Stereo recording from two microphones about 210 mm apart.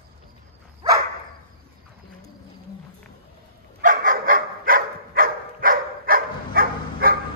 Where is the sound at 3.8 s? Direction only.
40° right (ahead or behind).